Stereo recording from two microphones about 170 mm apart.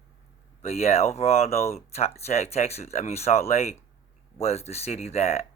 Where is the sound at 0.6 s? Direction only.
40° left (ahead or behind).